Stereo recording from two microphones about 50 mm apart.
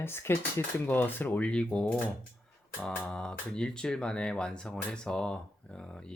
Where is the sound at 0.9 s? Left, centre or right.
Left.